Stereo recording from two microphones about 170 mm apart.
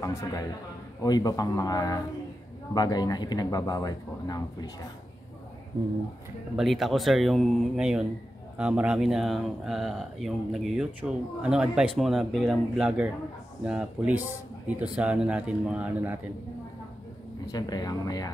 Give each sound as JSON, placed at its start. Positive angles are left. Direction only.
{"t": 0.0, "sound": "speech", "side_deg": 20}
{"t": 6.5, "sound": "speech", "side_deg": 0}
{"t": 17.5, "sound": "speech", "side_deg": 25}